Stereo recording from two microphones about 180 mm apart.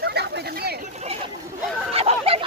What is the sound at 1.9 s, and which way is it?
Chicken, 35° right (ahead or behind).